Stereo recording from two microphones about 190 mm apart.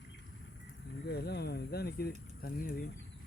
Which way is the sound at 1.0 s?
60° left (ahead or behind).